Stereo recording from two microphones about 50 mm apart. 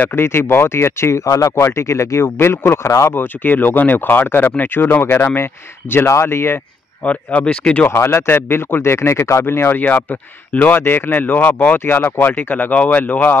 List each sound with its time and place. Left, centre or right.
0.1 s speech: left
2.9 s speech: left
3.2 s speech: left
5.0 s speech: left
6.0 s speech: left
7.1 s speech: left
7.7 s speech: left
8.0 s speech: left
10.5 s speech: left
10.8 s speech: left